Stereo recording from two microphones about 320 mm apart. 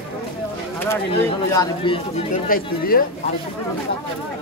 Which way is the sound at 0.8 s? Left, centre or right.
Centre.